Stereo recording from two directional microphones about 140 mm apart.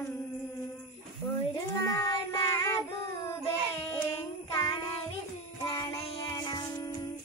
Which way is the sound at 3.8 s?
30° left (ahead or behind).